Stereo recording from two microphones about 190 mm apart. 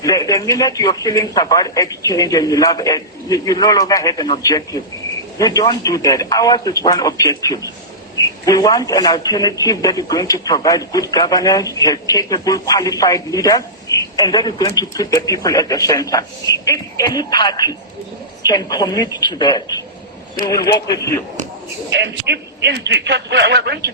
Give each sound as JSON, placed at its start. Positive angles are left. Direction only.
{"t": 0.0, "sound": "a man's voice", "side_deg": 20}
{"t": 21.8, "sound": "a man's voice", "side_deg": -70}